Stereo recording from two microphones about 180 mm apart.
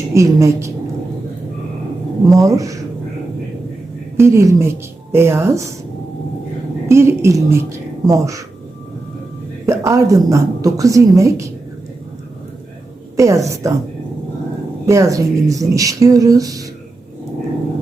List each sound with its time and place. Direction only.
0.1 s a woman's voice: 15° right (ahead or behind)
2.4 s a woman's voice: 20° right (ahead or behind)
4.2 s a woman's voice: 15° right (ahead or behind)
6.8 s a woman's voice: 15° right (ahead or behind)
9.6 s a woman's voice: 15° right (ahead or behind)
13.1 s a woman's voice: 15° right (ahead or behind)
14.8 s speech: 15° right (ahead or behind)